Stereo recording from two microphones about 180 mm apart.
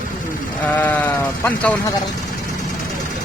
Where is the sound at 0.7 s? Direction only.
10° left (ahead or behind).